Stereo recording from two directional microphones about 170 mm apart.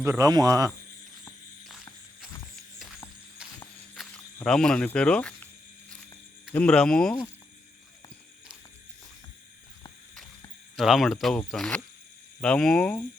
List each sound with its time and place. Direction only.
0.0 s speech: 20° right (ahead or behind)
1.2 s a sound: centre (ahead or behind)
3.9 s cricket: centre (ahead or behind)
6.5 s cricket: 5° left (ahead or behind)
10.8 s cricket: centre (ahead or behind)